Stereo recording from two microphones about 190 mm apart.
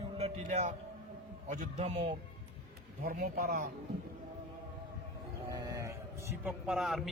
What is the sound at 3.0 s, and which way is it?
Speech, 50° right (ahead or behind).